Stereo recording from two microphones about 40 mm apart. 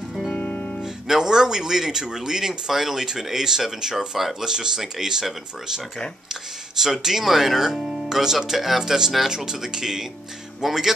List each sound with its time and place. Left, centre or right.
0.4 s music: left
1.0 s a man's voice: centre
6.8 s a man's voice: centre